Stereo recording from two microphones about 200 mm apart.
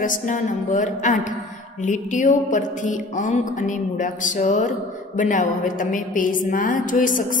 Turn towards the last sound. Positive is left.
turn(degrees=40)  # may be behind; listen again after turning